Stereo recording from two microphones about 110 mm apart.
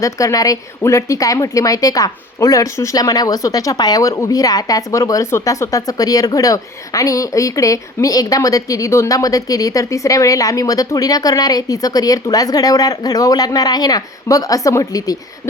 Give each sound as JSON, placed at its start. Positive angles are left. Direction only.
{"t": 0.0, "sound": "a woman's voice", "side_deg": 30}